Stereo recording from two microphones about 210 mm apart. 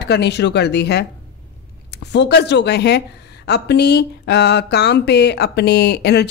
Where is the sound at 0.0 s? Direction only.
50° left (ahead or behind).